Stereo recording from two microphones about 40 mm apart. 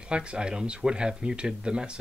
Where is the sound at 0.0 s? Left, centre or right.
Right.